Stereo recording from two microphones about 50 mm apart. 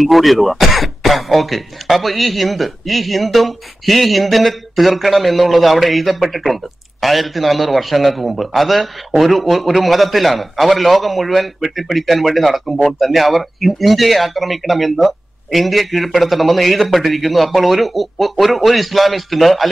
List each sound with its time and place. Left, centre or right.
0.0 s speech: centre